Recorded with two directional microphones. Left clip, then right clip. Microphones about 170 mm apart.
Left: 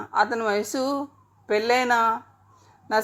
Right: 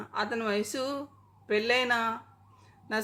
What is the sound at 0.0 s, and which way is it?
Speech, 20° left (ahead or behind).